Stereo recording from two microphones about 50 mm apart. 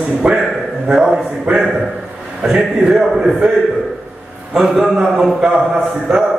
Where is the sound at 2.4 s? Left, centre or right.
Centre.